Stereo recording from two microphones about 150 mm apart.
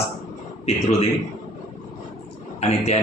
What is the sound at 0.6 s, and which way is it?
Speech, 45° left (ahead or behind).